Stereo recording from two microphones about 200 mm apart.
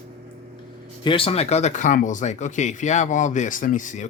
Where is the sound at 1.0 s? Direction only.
25° left (ahead or behind).